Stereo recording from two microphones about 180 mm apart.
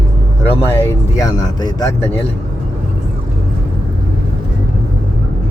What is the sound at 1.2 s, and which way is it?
Speech, 20° left (ahead or behind).